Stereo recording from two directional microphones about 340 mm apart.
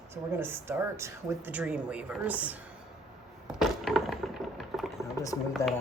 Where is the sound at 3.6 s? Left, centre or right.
Centre.